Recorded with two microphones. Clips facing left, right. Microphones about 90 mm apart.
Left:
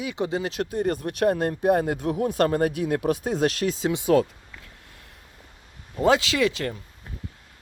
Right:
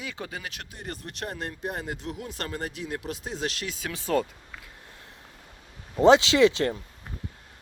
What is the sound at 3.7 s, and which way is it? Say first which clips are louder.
Speech: left 10 dB; 25° left (ahead or behind).